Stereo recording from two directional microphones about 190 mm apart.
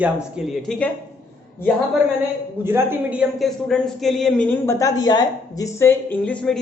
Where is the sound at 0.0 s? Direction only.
5° right (ahead or behind).